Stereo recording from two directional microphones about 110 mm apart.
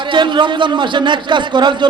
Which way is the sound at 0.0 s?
45° right (ahead or behind).